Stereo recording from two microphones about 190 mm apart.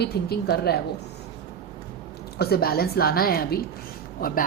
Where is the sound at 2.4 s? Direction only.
55° left (ahead or behind).